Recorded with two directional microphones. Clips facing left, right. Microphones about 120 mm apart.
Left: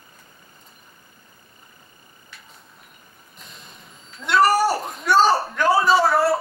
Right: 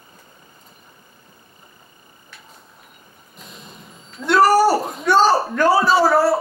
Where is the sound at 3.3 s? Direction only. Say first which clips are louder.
Right 5 dB; centre (ahead or behind).